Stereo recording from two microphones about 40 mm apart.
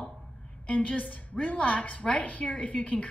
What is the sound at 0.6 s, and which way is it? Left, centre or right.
A woman's voice, left.